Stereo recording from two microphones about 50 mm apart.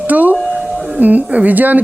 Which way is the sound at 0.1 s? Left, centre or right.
Right.